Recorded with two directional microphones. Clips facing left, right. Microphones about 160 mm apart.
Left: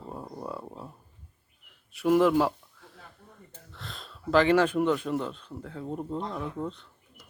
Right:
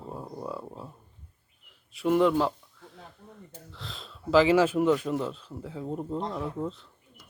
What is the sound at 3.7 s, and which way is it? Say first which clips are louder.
Speech: left 1 dB; centre (ahead or behind).